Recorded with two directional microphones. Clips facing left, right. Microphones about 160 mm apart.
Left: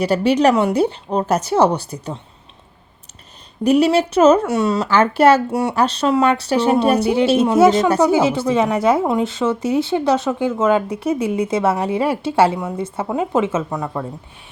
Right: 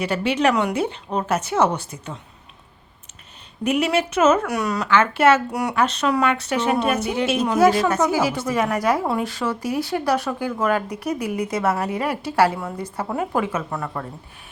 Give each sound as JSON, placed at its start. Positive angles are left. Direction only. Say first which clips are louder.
{"t": 0.0, "sound": "a woman's voice", "louder": "left 5 dB", "side_deg": 40}
{"t": 3.6, "sound": "a woman's voice", "louder": "left 6 dB", "side_deg": 35}